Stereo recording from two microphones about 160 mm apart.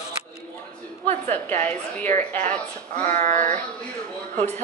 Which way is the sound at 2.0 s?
50° right (ahead or behind).